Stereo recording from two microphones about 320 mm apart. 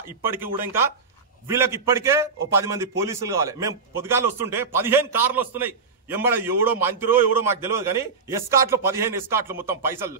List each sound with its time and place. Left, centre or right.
0.2 s a man's voice: centre